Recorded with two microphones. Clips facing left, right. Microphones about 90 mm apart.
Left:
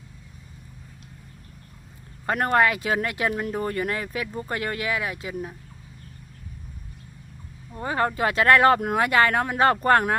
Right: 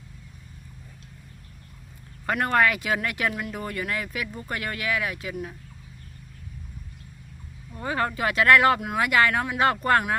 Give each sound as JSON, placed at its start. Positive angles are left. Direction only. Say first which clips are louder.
{"t": 2.2, "sound": "speech", "louder": "left 1 dB", "side_deg": 30}
{"t": 7.7, "sound": "speech", "louder": "left 2 dB", "side_deg": 30}